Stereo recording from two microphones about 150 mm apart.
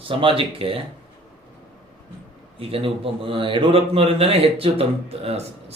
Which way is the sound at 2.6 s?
40° right (ahead or behind).